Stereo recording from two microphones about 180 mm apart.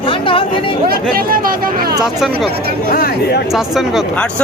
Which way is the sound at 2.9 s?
55° left (ahead or behind).